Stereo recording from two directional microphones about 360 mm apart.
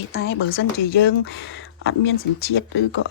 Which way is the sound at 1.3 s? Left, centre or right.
Left.